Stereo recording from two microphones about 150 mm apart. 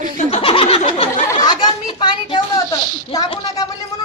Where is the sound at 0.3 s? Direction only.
40° left (ahead or behind).